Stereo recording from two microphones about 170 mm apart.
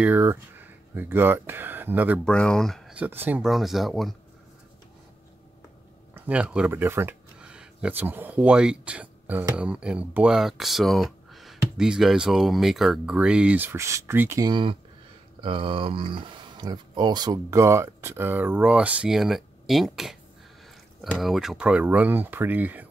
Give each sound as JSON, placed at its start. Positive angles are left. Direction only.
{"t": 0.0, "sound": "speech", "side_deg": -10}
{"t": 2.2, "sound": "speech", "side_deg": 5}
{"t": 3.0, "sound": "speech", "side_deg": -10}
{"t": 6.1, "sound": "speech", "side_deg": -10}